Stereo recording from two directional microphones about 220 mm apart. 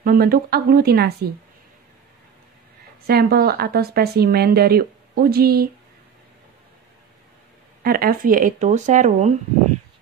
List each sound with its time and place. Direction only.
0.0 s speech: 40° right (ahead or behind)
3.1 s speech: 45° right (ahead or behind)
7.8 s speech: 40° right (ahead or behind)